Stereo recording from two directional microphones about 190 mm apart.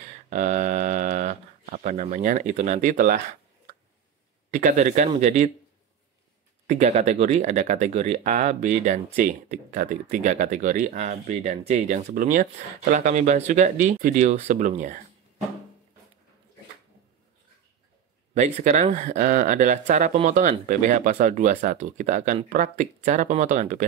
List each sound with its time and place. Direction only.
0.3 s a sound: 40° right (ahead or behind)
4.5 s speech: 45° right (ahead or behind)
6.7 s speech: 35° right (ahead or behind)
18.3 s speech: 40° right (ahead or behind)